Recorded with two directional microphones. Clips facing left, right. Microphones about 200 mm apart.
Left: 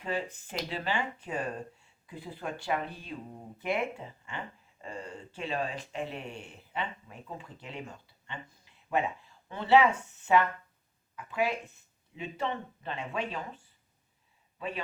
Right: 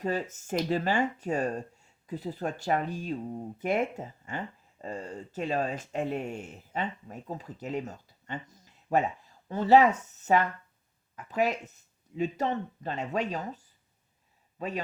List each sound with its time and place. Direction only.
0.0 s speech: 40° right (ahead or behind)